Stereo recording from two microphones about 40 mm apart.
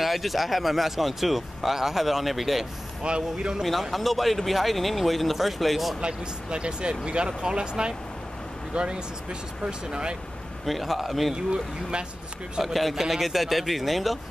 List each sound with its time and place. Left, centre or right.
0.0 s speech: centre
3.0 s speech: right
3.6 s speech: centre
5.9 s speech: right
10.6 s speech: centre
11.3 s speech: right
12.6 s speech: centre